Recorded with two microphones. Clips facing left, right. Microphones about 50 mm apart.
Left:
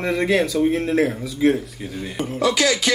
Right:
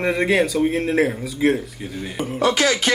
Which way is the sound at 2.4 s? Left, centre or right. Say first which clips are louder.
Right 1 dB; right.